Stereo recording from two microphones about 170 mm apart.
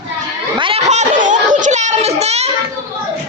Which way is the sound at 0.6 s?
40° right (ahead or behind).